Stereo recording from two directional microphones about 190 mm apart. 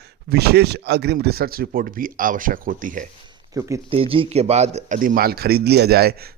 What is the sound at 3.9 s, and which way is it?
A man's voice, 30° right (ahead or behind).